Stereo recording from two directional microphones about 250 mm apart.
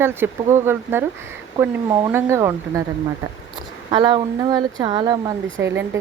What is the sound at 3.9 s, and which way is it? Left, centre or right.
Speech, centre.